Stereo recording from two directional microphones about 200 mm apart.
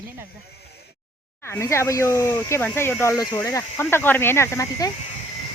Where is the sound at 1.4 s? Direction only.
15° left (ahead or behind).